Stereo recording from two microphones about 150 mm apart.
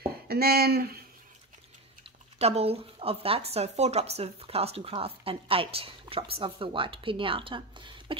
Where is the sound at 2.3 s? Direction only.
45° right (ahead or behind).